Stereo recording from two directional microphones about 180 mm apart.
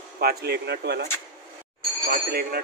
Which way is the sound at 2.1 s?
55° right (ahead or behind).